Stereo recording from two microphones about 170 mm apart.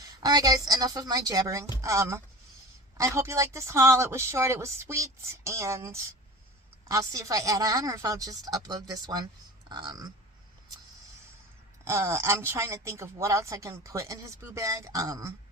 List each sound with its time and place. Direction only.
0.0 s a woman's voice: 20° right (ahead or behind)
11.9 s a woman's voice: 15° right (ahead or behind)